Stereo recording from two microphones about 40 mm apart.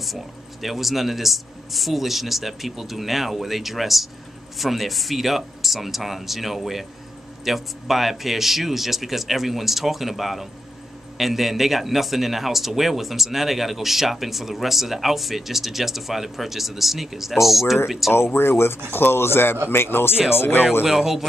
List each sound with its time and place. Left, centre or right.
0.0 s a man's voice: centre
18.1 s speech: left
18.9 s speech: left
20.8 s speech: centre